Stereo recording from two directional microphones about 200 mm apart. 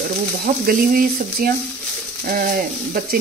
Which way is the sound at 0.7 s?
50° right (ahead or behind).